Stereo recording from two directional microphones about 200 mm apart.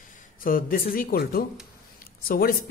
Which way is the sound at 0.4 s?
45° left (ahead or behind).